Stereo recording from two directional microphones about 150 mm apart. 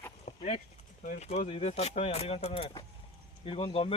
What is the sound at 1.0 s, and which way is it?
Speech, 50° left (ahead or behind).